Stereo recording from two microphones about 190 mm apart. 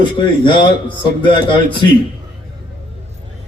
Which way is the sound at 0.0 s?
25° left (ahead or behind).